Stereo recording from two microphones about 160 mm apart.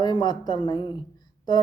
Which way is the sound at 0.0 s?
25° left (ahead or behind).